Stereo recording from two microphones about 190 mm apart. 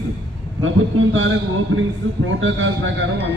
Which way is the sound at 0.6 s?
90° right.